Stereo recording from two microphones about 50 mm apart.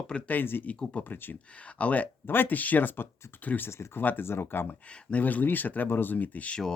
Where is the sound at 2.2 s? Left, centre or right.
Left.